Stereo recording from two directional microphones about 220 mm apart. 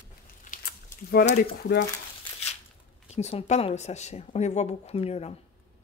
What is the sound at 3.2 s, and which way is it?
Speech, 30° left (ahead or behind).